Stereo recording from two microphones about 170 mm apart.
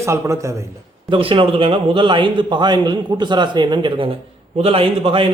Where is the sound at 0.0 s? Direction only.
15° right (ahead or behind).